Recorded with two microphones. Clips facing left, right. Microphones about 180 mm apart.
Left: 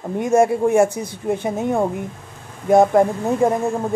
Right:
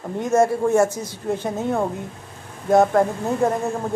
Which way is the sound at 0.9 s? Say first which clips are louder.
Left 3 dB; 60° left (ahead or behind).